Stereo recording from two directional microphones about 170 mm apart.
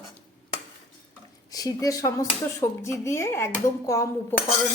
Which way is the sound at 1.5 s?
20° left (ahead or behind).